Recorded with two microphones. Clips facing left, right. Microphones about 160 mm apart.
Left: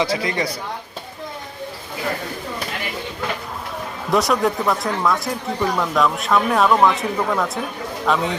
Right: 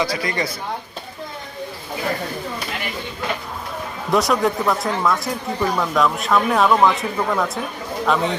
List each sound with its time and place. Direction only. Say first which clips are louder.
0.0 s speech: left 1 dB; 25° left (ahead or behind)
4.1 s speech: even; centre (ahead or behind)